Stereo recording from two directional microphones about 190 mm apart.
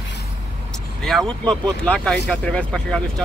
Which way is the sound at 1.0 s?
5° left (ahead or behind).